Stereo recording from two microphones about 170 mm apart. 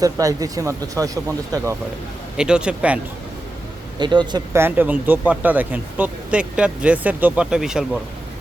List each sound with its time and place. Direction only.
0.0 s speech: 20° right (ahead or behind)
2.3 s speech: 5° right (ahead or behind)
3.9 s speech: 25° right (ahead or behind)
4.5 s speech: 10° right (ahead or behind)